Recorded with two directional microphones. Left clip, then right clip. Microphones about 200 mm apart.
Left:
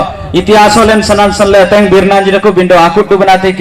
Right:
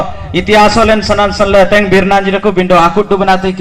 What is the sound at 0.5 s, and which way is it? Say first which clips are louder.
Speech: left 2 dB; 45° left (ahead or behind).